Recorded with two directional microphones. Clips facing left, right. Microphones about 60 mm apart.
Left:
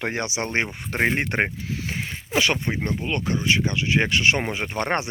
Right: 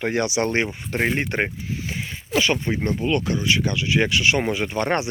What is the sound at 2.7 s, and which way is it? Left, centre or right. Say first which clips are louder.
Speech: right 4 dB; left.